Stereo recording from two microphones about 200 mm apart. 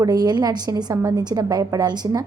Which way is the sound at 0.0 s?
20° right (ahead or behind).